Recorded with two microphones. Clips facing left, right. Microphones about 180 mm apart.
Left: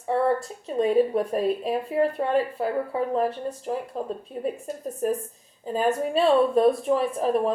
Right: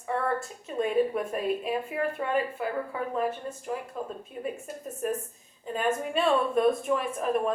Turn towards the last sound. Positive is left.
turn(degrees=35)  # may be behind; listen again after turning